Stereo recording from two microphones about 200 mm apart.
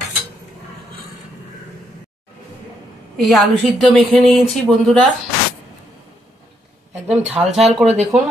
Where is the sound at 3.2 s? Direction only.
Centre (ahead or behind).